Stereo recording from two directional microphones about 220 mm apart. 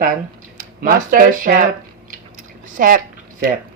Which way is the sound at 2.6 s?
40° right (ahead or behind).